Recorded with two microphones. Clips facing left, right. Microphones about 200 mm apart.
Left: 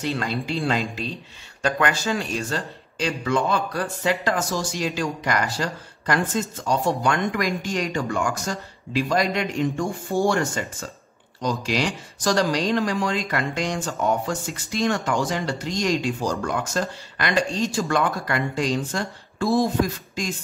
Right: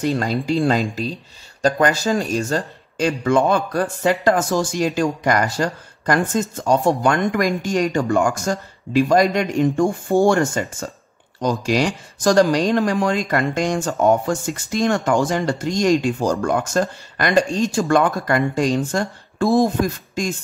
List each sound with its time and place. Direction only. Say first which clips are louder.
0.0 s speech: right 6 dB; 45° right (ahead or behind)